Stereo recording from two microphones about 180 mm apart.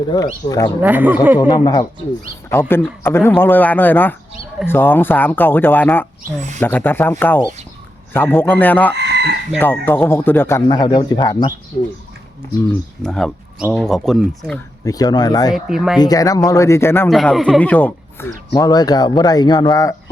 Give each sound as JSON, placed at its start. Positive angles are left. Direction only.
{"t": 0.1, "sound": "speech", "side_deg": 25}
{"t": 0.8, "sound": "speech", "side_deg": -10}
{"t": 1.4, "sound": "speech", "side_deg": 25}
{"t": 2.5, "sound": "speech", "side_deg": 10}
{"t": 9.0, "sound": "chicken", "side_deg": -70}
{"t": 9.6, "sound": "speech", "side_deg": 10}
{"t": 13.0, "sound": "speech", "side_deg": 5}
{"t": 14.8, "sound": "speech", "side_deg": 20}
{"t": 15.5, "sound": "speech", "side_deg": -5}
{"t": 16.0, "sound": "speech", "side_deg": 20}
{"t": 17.1, "sound": "speech", "side_deg": 0}